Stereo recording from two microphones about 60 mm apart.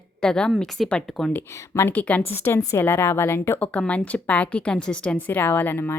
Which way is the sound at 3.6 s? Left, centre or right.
Left.